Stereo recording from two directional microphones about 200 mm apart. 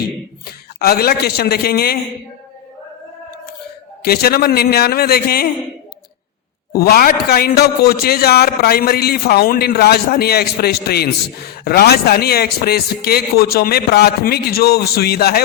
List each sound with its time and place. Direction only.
0.8 s a man's voice: 50° left (ahead or behind)
4.0 s a man's voice: 50° left (ahead or behind)
6.7 s a man's voice: 50° left (ahead or behind)